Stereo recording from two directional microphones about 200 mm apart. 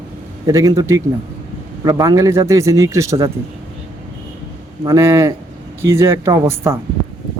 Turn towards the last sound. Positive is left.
turn(degrees=-15)  # may be behind; listen again after turning